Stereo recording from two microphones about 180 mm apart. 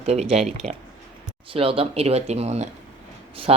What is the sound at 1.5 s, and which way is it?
Speech, 30° right (ahead or behind).